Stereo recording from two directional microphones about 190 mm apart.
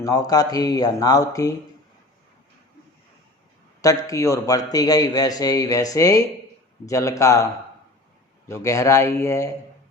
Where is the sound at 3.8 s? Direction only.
15° left (ahead or behind).